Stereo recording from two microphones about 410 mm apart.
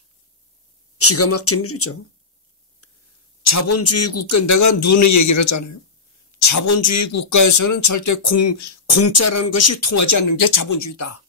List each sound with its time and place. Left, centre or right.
0.9 s a man's voice: left
3.4 s a man's voice: left